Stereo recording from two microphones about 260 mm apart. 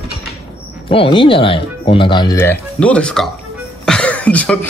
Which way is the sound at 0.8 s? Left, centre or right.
Centre.